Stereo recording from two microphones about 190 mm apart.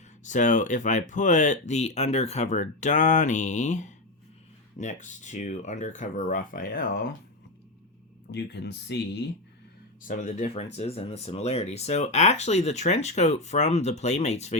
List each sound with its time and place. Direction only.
0.3 s speech: 40° left (ahead or behind)
8.3 s speech: 65° left (ahead or behind)
10.0 s speech: 40° left (ahead or behind)